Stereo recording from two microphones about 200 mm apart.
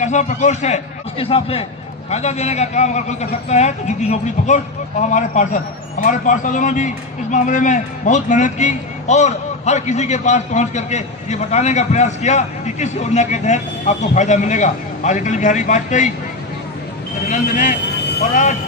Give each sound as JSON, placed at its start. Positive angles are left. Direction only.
{"t": 0.0, "sound": "a man's voice", "side_deg": 35}
{"t": 17.2, "sound": "a man's voice", "side_deg": 40}